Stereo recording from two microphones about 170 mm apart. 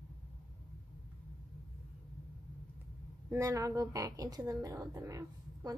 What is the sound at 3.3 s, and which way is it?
A woman's voice, 20° right (ahead or behind).